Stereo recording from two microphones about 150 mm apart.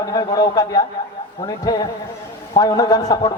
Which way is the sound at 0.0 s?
25° left (ahead or behind).